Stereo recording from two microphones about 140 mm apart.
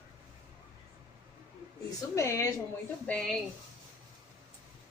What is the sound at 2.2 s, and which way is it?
Speech, 20° left (ahead or behind).